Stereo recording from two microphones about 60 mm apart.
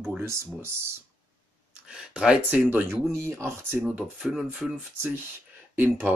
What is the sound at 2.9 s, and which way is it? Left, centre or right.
Speech, right.